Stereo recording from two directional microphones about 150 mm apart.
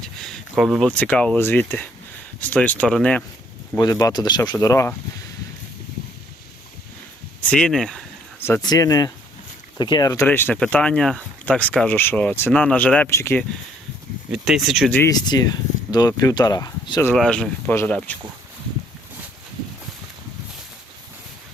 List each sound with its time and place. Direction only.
0.0 s speech: 5° left (ahead or behind)
3.8 s speech: 25° left (ahead or behind)
7.4 s speech: 5° left (ahead or behind)
8.4 s speech: 15° left (ahead or behind)
8.6 s speech: 25° left (ahead or behind)
10.2 s speech: 10° left (ahead or behind)
14.3 s speech: 5° right (ahead or behind)
14.9 s speech: 20° left (ahead or behind)
17.2 s speech: 5° left (ahead or behind)